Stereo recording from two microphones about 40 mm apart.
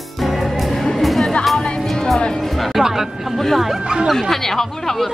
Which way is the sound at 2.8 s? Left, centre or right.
Centre.